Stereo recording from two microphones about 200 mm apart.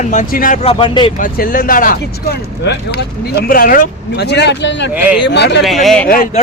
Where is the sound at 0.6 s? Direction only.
25° left (ahead or behind).